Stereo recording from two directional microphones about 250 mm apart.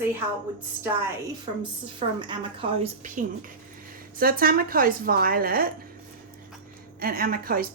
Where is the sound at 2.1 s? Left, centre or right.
Centre; by 5.7 s right.